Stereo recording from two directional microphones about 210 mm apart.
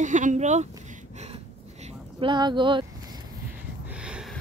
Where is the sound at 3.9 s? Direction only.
5° right (ahead or behind).